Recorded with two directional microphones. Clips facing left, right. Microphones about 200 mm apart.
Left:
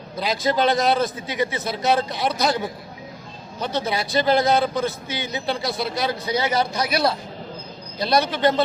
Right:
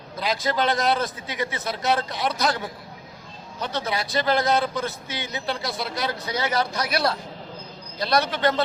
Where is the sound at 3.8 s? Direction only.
25° left (ahead or behind).